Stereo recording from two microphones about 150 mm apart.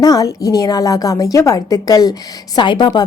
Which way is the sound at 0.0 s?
25° left (ahead or behind).